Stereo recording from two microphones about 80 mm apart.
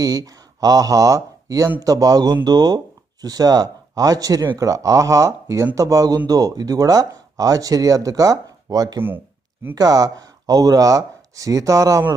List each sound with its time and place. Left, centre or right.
0.0 s speech: right
9.0 s speech: right
9.7 s speech: right